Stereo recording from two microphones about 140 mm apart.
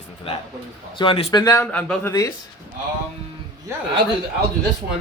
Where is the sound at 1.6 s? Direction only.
10° left (ahead or behind).